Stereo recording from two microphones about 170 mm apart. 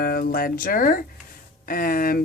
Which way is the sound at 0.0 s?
60° left (ahead or behind).